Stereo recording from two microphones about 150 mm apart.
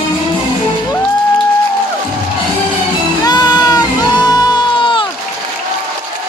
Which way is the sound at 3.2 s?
25° left (ahead or behind).